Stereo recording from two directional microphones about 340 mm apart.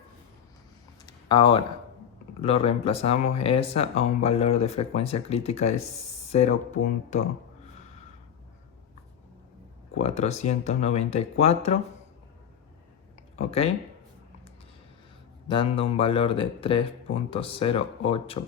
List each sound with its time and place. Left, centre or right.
1.0 s a sound: centre
2.4 s speech: centre
10.0 s speech: centre
13.3 s speech: centre
15.4 s speech: centre